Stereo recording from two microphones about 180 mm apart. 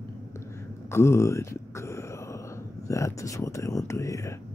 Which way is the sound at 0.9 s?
15° left (ahead or behind).